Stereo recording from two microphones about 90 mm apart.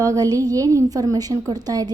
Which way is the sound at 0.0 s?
40° right (ahead or behind).